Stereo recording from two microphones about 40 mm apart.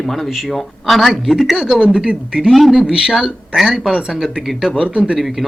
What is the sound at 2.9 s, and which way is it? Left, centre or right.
Speech, right.